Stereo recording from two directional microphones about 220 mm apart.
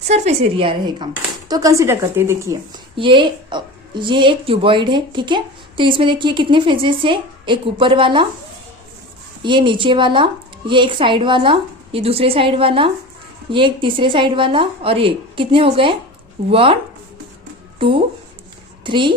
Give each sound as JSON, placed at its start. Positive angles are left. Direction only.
{"t": 0.1, "sound": "a woman's voice", "side_deg": -25}
{"t": 9.4, "sound": "a woman's voice", "side_deg": -20}
{"t": 17.7, "sound": "a woman's voice", "side_deg": -25}